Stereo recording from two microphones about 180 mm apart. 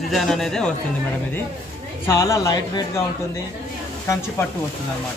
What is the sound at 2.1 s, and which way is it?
Speech, 15° left (ahead or behind).